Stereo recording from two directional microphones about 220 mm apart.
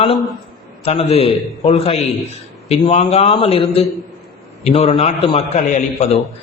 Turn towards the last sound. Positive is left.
turn(degrees=30)  # may be behind; listen again after turning